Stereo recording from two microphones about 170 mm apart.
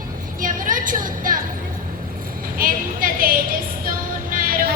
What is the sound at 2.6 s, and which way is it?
A woman's voice, 55° right (ahead or behind).